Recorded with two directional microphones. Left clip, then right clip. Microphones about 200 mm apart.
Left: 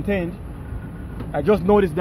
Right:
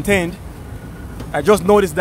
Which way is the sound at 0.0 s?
20° right (ahead or behind).